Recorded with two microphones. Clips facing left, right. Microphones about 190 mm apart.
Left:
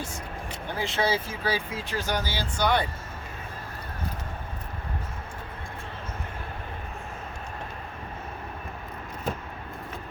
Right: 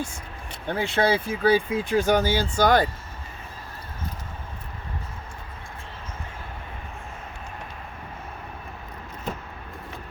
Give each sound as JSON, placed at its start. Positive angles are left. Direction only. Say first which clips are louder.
{"t": 0.7, "sound": "speech", "louder": "right 5 dB", "side_deg": -60}